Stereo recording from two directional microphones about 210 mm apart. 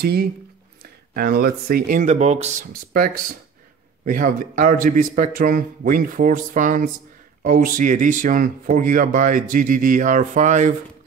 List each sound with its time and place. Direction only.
0.0 s speech: 50° right (ahead or behind)